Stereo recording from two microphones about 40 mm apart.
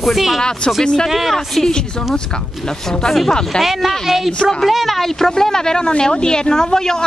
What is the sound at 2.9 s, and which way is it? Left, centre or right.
Speech, centre.